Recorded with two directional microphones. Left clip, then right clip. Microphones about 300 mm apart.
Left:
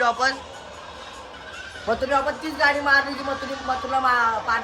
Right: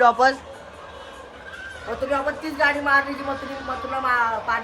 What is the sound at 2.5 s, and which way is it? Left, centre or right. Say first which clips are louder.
Speech: even; centre.